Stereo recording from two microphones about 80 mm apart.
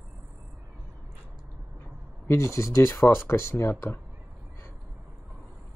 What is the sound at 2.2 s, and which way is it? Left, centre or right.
Speech, left.